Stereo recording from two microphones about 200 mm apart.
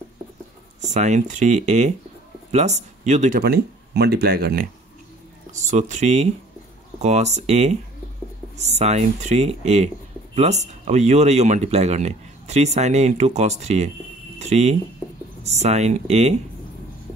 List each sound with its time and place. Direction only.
0.7 s speech: 35° right (ahead or behind); by 4.6 s 50° right (ahead or behind)
5.5 s speech: 35° right (ahead or behind)